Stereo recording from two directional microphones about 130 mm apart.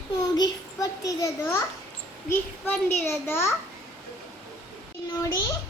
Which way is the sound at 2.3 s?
15° left (ahead or behind).